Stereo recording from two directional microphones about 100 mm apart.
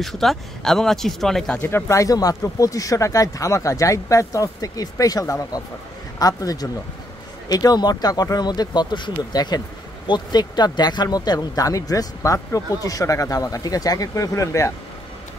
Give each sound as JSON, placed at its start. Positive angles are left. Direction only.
{"t": 0.0, "sound": "speech", "side_deg": 0}
{"t": 1.6, "sound": "speech", "side_deg": 15}
{"t": 1.9, "sound": "speech", "side_deg": 35}